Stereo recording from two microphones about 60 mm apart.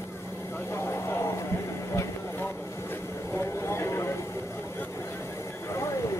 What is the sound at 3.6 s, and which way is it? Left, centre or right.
Horse, left.